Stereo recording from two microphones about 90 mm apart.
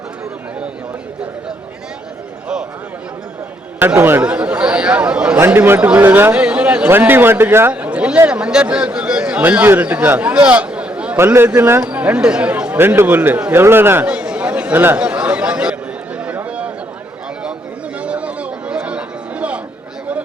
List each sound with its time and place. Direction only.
3.8 s a man's voice: 25° right (ahead or behind)
5.4 s a man's voice: 25° right (ahead or behind)
6.3 s a man's voice: 10° right (ahead or behind)
7.7 s a sound: 15° right (ahead or behind)
8.3 s a man's voice: 10° right (ahead or behind)
12.7 s a man's voice: 25° right (ahead or behind)
14.1 s chatter: 15° right (ahead or behind)
14.9 s a sound: 10° right (ahead or behind)
18.0 s chatter: 15° right (ahead or behind)